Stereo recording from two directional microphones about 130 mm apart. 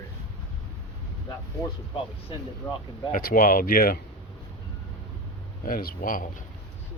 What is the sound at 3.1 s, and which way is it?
Speech, 90° left.